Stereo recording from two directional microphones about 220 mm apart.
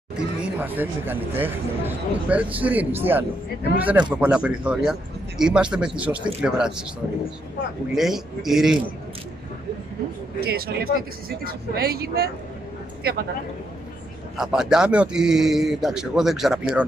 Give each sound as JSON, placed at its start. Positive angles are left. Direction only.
{"t": 0.1, "sound": "a man's voice", "side_deg": -5}
{"t": 7.9, "sound": "a man's voice", "side_deg": 0}
{"t": 10.4, "sound": "speech", "side_deg": -45}
{"t": 14.3, "sound": "a man's voice", "side_deg": 0}